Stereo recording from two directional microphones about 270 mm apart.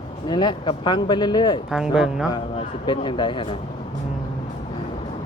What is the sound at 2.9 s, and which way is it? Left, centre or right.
Speech, centre.